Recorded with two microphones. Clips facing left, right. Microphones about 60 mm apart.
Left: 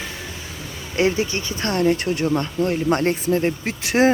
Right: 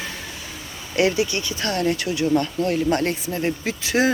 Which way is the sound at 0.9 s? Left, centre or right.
Left.